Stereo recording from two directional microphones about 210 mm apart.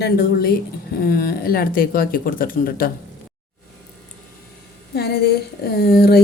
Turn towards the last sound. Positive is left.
turn(degrees=50)  # may be behind; listen again after turning